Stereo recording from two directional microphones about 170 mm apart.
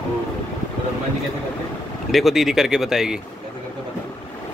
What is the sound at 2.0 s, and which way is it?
Speech, centre (ahead or behind).